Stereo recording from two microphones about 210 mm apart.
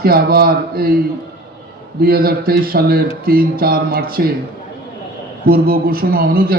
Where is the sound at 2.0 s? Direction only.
45° right (ahead or behind).